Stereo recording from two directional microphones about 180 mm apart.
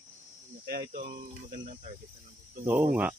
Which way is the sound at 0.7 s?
55° right (ahead or behind).